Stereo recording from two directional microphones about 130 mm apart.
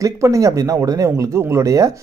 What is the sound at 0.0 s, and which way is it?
Speech, 25° right (ahead or behind).